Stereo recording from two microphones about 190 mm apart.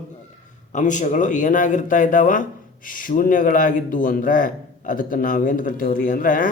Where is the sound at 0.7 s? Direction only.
40° left (ahead or behind).